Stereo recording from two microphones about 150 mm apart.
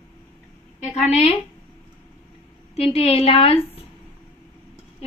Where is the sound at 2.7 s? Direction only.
40° left (ahead or behind).